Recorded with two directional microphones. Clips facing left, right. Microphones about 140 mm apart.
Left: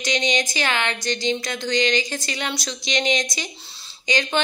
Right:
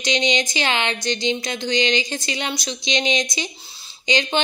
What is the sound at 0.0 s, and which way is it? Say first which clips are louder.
Speech: right 2 dB; 20° right (ahead or behind).